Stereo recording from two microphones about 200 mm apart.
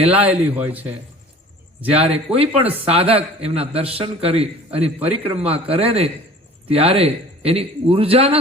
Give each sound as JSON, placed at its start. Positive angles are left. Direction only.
{"t": 0.0, "sound": "a man's voice", "side_deg": -30}
{"t": 0.3, "sound": "a man's voice", "side_deg": -10}
{"t": 1.9, "sound": "a man's voice", "side_deg": -30}